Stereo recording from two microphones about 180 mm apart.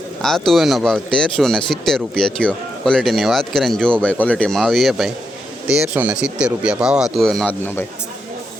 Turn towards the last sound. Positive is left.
turn(degrees=10)  # may be behind; listen again after turning